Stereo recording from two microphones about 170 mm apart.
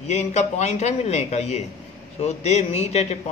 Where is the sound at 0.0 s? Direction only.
40° left (ahead or behind).